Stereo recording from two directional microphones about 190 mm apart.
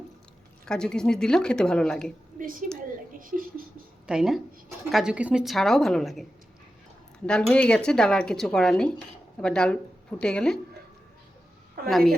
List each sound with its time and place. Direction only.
0.6 s speech: 5° left (ahead or behind)
2.4 s a woman's voice: 45° right (ahead or behind)
4.0 s a woman's voice: 5° right (ahead or behind)
7.3 s speech: 5° left (ahead or behind)
11.9 s speech: centre (ahead or behind)